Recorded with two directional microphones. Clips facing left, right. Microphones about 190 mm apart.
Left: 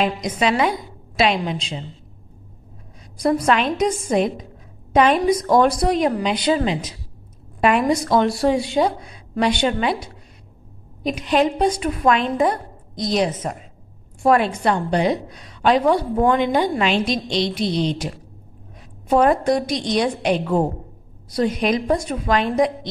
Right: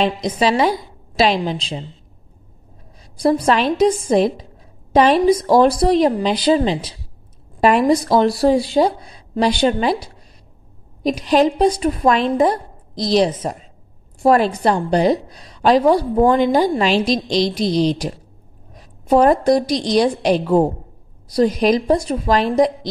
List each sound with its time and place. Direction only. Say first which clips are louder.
0.0 s a woman's voice: right 3 dB; 30° right (ahead or behind)
3.2 s a woman's voice: right 2 dB; 30° right (ahead or behind)